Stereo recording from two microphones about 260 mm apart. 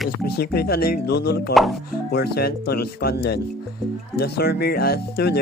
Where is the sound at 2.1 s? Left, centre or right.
Left.